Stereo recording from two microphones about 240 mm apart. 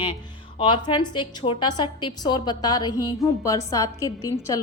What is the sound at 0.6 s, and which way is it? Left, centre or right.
A woman's voice, centre.